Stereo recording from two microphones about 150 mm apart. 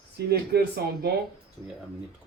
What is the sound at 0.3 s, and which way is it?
Speech, 90° right.